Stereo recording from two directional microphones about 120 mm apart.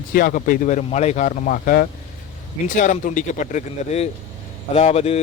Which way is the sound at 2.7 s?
90° left.